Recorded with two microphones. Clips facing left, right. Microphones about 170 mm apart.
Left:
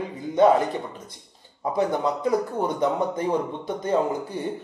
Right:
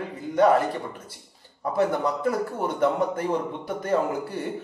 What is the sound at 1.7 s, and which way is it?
A man's voice, 15° left (ahead or behind).